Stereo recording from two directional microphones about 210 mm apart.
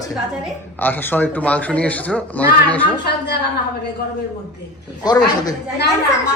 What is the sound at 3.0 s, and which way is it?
Speech, 50° left (ahead or behind).